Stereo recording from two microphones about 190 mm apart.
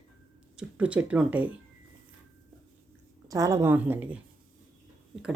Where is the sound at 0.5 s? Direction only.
5° right (ahead or behind).